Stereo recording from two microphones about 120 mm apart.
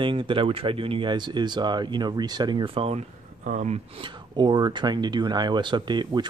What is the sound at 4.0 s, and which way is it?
Speech, 40° right (ahead or behind).